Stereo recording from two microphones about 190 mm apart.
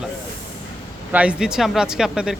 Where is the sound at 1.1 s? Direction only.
5° right (ahead or behind).